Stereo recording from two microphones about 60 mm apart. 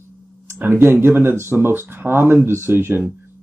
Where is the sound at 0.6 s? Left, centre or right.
Right.